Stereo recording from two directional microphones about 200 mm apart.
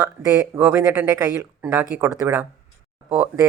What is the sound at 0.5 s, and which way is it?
Speech, 10° right (ahead or behind).